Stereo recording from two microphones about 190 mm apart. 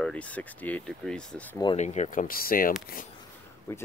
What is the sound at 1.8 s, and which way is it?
Speech, 40° left (ahead or behind).